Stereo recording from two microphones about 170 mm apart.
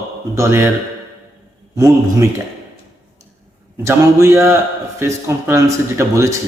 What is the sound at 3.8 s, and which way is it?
A man's voice, 15° right (ahead or behind).